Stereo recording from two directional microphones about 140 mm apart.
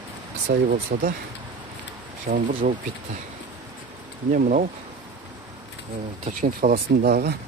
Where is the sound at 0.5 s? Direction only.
90° right.